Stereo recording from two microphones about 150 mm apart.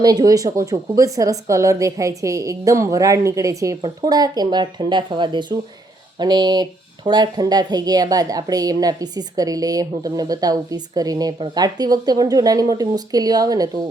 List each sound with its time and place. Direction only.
0.0 s speech: 25° right (ahead or behind)